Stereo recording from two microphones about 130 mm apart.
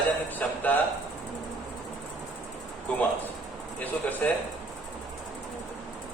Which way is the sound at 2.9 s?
10° left (ahead or behind).